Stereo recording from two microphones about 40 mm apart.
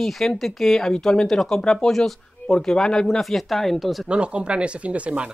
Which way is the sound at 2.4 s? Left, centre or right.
Centre.